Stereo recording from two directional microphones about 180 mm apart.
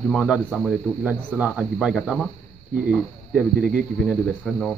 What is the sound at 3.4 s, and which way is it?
Speech, centre (ahead or behind).